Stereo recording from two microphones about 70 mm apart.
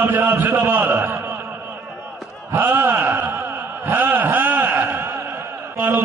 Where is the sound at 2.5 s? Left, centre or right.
Right.